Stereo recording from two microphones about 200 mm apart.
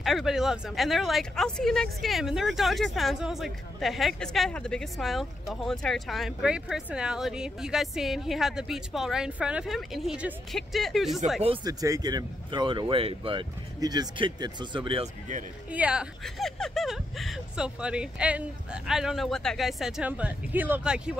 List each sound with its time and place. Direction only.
0.0 s speech: centre (ahead or behind)
11.4 s speech: 25° right (ahead or behind)
15.7 s speech: 5° right (ahead or behind)